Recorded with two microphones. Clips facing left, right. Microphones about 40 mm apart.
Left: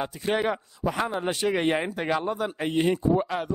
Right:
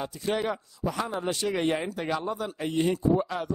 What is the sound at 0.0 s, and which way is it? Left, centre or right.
Speech, left.